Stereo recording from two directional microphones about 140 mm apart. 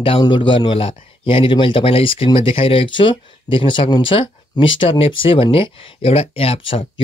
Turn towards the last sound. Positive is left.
turn(degrees=40)  # may be behind; listen again after turning